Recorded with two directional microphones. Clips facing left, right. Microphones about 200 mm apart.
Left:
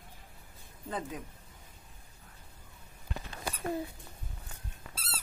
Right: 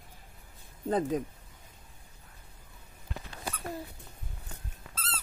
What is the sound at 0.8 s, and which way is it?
Speech, 40° right (ahead or behind).